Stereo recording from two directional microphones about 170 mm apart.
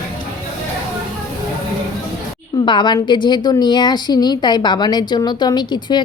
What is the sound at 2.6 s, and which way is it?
A woman's voice, 25° left (ahead or behind).